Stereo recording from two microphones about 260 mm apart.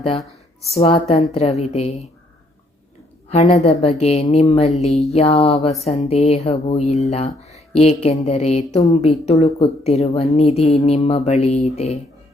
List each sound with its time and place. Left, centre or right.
0.7 s speech: left
3.2 s speech: left